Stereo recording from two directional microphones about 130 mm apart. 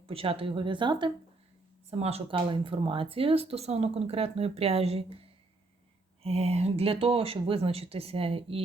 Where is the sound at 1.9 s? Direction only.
50° right (ahead or behind).